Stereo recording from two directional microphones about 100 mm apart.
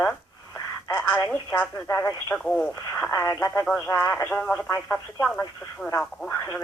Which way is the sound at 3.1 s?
25° left (ahead or behind).